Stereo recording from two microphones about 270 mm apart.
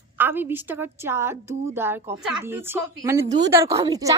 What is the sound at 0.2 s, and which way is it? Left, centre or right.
A woman's voice, centre.